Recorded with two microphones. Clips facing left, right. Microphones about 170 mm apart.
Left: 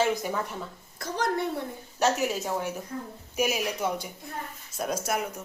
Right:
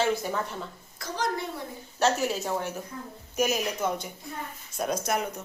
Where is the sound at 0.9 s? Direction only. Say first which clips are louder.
Left 1 dB; 55° left (ahead or behind).